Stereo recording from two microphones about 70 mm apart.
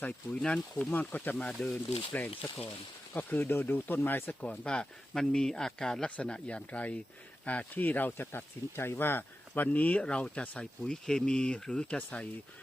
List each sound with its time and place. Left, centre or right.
0.4 s speech: centre
0.9 s speech: left